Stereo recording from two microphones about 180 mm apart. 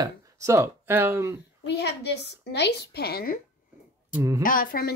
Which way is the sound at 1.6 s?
70° left (ahead or behind).